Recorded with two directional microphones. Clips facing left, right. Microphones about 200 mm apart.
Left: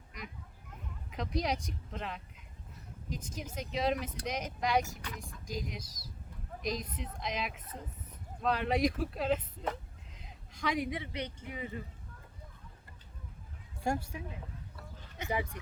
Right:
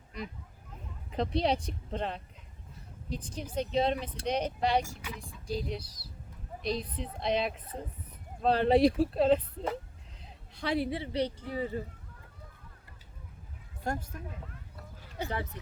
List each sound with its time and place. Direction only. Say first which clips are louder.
1.1 s a woman's voice: right 5 dB; 30° right (ahead or behind)
4.9 s speech: right 2 dB; 10° right (ahead or behind)
5.5 s a woman's voice: right 6 dB; 35° right (ahead or behind)
13.8 s speech: left 1 dB; 10° left (ahead or behind)
15.3 s speech: left 4 dB; 10° left (ahead or behind)